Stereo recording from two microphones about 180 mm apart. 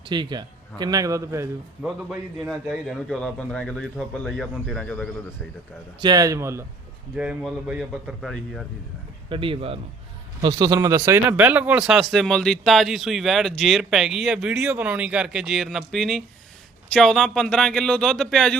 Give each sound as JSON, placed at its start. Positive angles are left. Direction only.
{"t": 0.0, "sound": "a man's voice", "side_deg": -25}
{"t": 1.8, "sound": "speech", "side_deg": -5}
{"t": 6.0, "sound": "a man's voice", "side_deg": -20}
{"t": 9.3, "sound": "speech", "side_deg": -30}
{"t": 10.4, "sound": "speech", "side_deg": -20}